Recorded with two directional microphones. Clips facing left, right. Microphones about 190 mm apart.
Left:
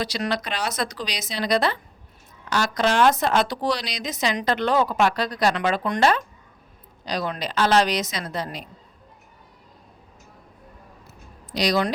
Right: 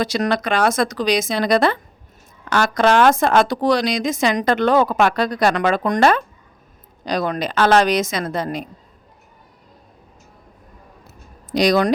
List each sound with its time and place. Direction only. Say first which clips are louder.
0.0 s speech: right 6 dB; 50° right (ahead or behind)
11.5 s speech: right 7 dB; 50° right (ahead or behind)